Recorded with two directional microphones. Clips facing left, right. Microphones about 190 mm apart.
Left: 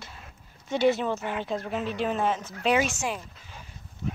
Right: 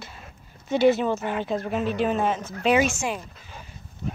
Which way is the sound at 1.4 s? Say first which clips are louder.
Right 4 dB; 5° right (ahead or behind).